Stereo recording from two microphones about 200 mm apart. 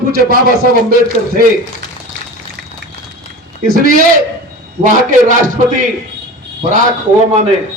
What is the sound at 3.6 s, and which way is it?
A man's voice, 45° right (ahead or behind).